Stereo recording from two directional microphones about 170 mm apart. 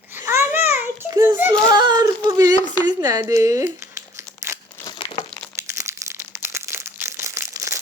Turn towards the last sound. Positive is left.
turn(degrees=-15)  # may be behind; listen again after turning